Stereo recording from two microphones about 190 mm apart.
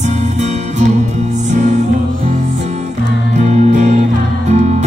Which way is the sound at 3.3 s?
35° right (ahead or behind).